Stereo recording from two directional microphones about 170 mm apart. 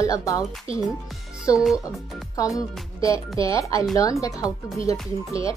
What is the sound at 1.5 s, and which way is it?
Speech, 20° left (ahead or behind).